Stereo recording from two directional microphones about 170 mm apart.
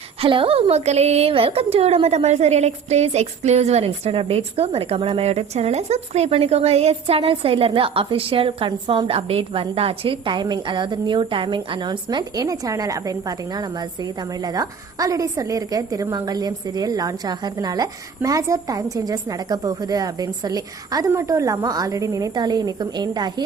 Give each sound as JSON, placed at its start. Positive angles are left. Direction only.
{"t": 0.2, "sound": "a woman's voice", "side_deg": -30}